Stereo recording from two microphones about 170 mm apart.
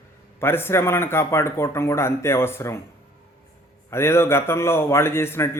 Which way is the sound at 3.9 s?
15° left (ahead or behind).